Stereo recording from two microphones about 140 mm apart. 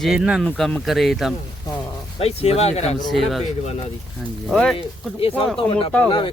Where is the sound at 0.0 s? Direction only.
5° right (ahead or behind).